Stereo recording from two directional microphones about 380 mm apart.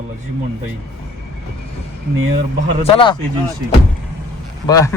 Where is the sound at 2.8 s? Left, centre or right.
Centre.